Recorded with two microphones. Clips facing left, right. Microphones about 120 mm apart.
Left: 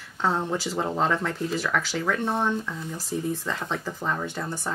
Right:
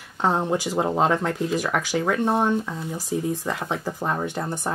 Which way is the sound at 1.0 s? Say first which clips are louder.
Right 3 dB; 55° right (ahead or behind).